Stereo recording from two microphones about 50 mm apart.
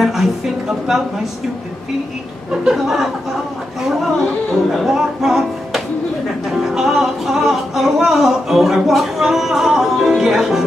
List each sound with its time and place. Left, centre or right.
0.0 s music: centre
2.5 s chuckle: centre
3.8 s music: centre